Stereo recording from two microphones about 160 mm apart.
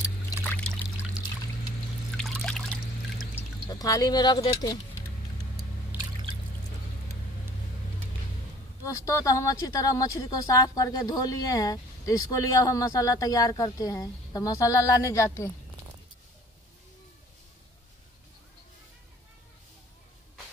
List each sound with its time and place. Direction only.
0.4 s trickle: 10° left (ahead or behind)
2.1 s trickle: 5° left (ahead or behind)
3.7 s speech: 25° left (ahead or behind)
5.9 s drip: 10° right (ahead or behind)
8.8 s speech: 20° left (ahead or behind)